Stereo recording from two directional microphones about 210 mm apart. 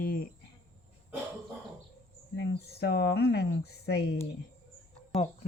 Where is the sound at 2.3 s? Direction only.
55° left (ahead or behind).